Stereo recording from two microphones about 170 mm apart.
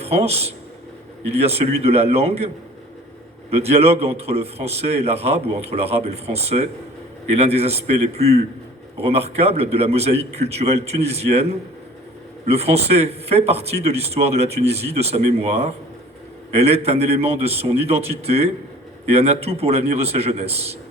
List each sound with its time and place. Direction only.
0.0 s a man's voice: 35° right (ahead or behind)
3.5 s a man's voice: 35° right (ahead or behind)